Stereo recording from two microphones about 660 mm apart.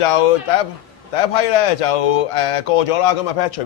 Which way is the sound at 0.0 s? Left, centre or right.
Left.